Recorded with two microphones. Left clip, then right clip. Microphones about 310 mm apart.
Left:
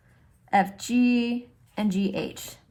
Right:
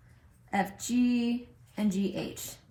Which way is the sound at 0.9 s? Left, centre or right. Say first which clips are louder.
Left 5 dB; left.